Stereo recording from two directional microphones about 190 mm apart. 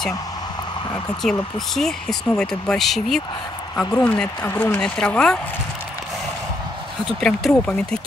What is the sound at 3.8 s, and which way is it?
Speech, 20° left (ahead or behind).